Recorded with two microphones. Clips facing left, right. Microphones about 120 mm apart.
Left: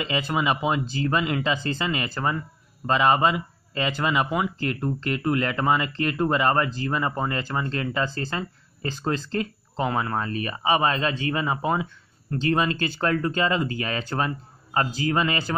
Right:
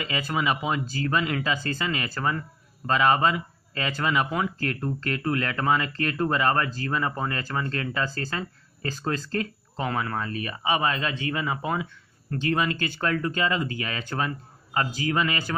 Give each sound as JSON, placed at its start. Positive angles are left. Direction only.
{"t": 0.0, "sound": "speech", "side_deg": 20}